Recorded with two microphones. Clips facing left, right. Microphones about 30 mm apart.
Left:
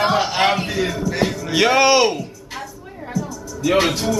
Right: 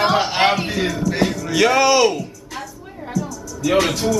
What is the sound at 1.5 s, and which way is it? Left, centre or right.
Speech, centre.